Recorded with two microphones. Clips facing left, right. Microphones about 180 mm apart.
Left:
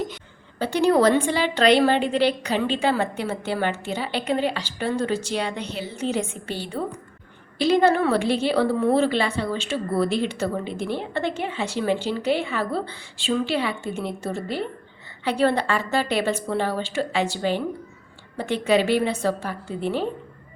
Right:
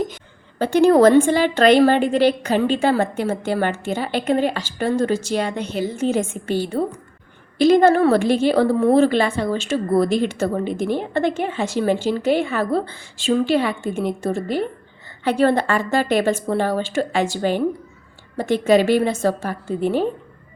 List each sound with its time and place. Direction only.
0.6 s a woman's voice: 50° right (ahead or behind)